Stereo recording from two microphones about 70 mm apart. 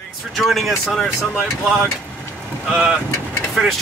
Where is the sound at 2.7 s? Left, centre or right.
Centre.